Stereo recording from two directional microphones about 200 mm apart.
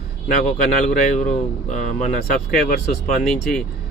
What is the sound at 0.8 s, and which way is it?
Speech, 40° left (ahead or behind).